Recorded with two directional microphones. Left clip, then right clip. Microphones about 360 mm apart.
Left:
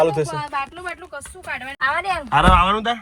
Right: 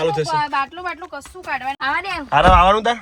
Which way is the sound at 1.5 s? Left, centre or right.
Right.